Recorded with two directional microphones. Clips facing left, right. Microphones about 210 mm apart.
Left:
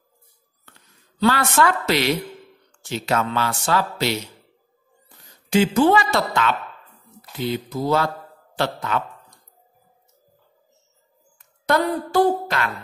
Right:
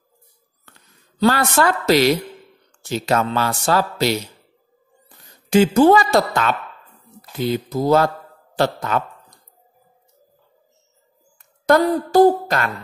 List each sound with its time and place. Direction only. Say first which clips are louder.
1.2 s speech: right 2 dB; 40° right (ahead or behind)
5.8 s a woman's voice: right 5 dB; 40° right (ahead or behind)
11.6 s a woman's voice: right 5 dB; 45° right (ahead or behind)